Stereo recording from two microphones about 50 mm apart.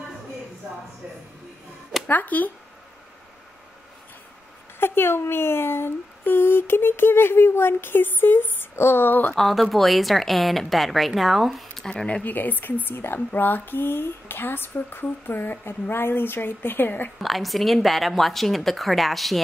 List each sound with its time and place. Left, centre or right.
2.0 s speech: left
4.7 s a woman's voice: left
9.3 s a woman's voice: centre
12.1 s a woman's voice: left
17.2 s a woman's voice: centre